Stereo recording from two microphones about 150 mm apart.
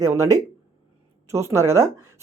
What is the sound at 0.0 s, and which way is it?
Speech, 20° right (ahead or behind).